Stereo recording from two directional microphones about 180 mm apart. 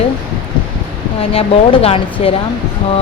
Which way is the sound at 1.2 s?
30° left (ahead or behind).